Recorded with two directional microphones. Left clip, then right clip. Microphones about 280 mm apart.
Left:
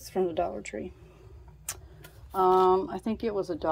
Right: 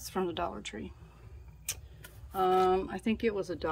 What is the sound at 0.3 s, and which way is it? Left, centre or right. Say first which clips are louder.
Speech: left 5 dB; centre.